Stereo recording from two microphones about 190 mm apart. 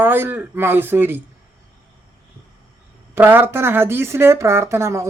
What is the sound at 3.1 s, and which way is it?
Speech, 10° right (ahead or behind).